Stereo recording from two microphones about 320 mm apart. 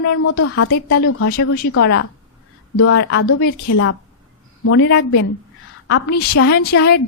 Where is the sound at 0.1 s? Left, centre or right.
Left.